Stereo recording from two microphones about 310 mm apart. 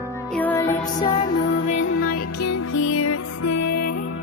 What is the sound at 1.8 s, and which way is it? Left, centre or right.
Music, left.